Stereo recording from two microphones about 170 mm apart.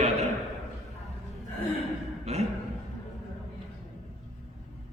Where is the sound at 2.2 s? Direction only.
40° right (ahead or behind).